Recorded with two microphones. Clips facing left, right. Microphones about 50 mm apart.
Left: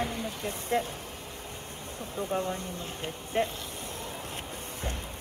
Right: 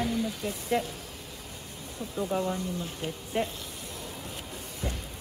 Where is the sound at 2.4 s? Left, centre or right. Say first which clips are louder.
Right 2 dB; left.